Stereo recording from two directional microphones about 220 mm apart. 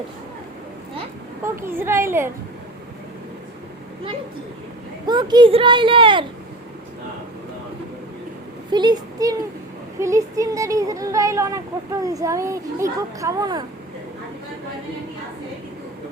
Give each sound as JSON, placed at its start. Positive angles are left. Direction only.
{"t": 1.6, "sound": "speech", "side_deg": -10}
{"t": 5.0, "sound": "a child's voice", "side_deg": -20}
{"t": 8.7, "sound": "a child's voice", "side_deg": -20}